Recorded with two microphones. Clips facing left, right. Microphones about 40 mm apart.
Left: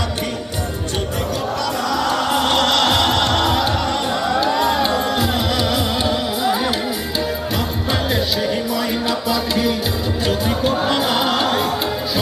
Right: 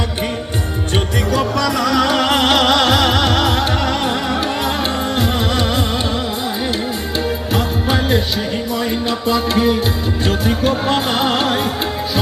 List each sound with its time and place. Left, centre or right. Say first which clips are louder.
1.9 s music: right 3 dB; right
2.6 s music: right 2 dB; centre
5.1 s music: right 1 dB; right
7.5 s music: right 3 dB; right
8.4 s music: even; right